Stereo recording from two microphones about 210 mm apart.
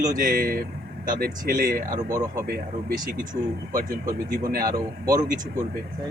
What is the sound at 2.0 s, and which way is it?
Speech, 15° right (ahead or behind).